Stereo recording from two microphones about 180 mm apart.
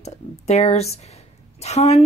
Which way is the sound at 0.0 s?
35° left (ahead or behind).